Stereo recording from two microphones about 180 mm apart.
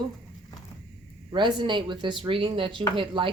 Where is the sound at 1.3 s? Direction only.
25° right (ahead or behind).